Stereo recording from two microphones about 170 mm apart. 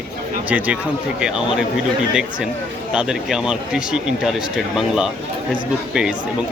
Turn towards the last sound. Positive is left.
turn(degrees=-5)  # may be behind; listen again after turning